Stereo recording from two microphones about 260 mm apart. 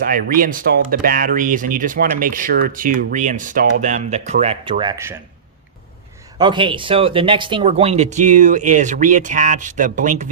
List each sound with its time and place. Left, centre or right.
0.0 s speech: right; by 5.2 s centre
6.4 s speech: centre